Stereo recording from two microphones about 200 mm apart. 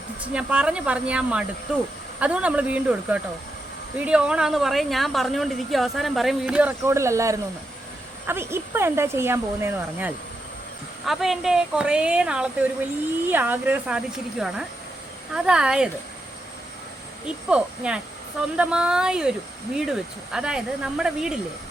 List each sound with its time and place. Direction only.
0.2 s speech: 5° right (ahead or behind)
17.5 s speech: 5° right (ahead or behind)